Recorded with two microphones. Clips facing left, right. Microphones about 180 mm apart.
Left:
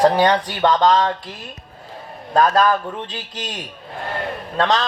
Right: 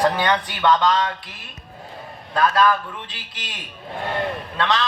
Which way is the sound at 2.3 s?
45° left (ahead or behind).